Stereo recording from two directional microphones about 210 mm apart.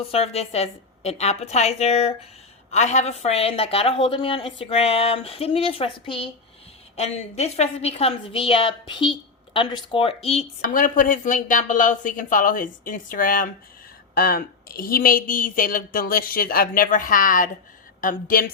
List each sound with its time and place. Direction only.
0.0 s a woman's voice: 30° left (ahead or behind)